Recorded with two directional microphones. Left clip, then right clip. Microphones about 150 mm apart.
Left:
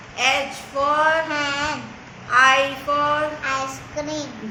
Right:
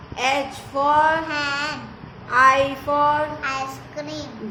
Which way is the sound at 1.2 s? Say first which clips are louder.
Left 1 dB; 45° left (ahead or behind).